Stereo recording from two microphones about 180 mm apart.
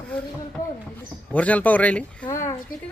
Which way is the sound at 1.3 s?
10° left (ahead or behind).